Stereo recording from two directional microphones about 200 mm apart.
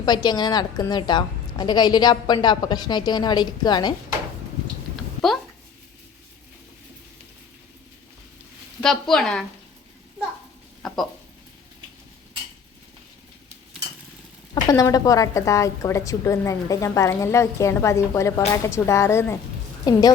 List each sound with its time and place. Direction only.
0.0 s a woman's voice: 20° left (ahead or behind)
8.8 s a woman's voice: centre (ahead or behind)
14.5 s a woman's voice: 20° left (ahead or behind)